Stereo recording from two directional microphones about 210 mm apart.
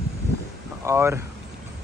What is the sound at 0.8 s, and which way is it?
Speech, 10° right (ahead or behind).